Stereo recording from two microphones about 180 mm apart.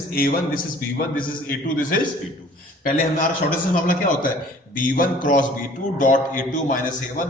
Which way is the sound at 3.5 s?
50° left (ahead or behind).